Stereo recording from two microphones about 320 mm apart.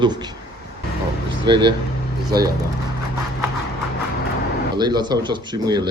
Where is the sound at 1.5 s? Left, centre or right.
Centre.